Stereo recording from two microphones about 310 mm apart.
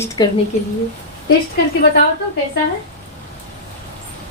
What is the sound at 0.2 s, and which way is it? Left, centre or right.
Speech, centre.